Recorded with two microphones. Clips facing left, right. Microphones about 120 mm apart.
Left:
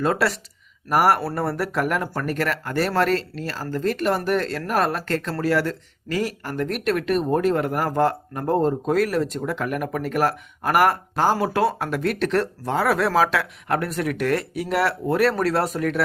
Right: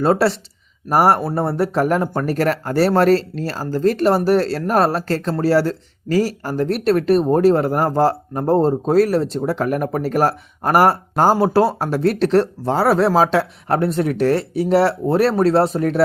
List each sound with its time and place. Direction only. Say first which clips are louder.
0.0 s speech: right 6 dB; 30° right (ahead or behind)